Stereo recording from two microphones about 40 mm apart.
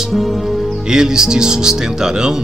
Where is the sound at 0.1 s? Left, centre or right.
Centre.